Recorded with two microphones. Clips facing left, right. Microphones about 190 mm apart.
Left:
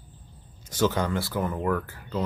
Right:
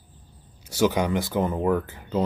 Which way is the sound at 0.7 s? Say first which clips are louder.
Right 3 dB; 10° right (ahead or behind).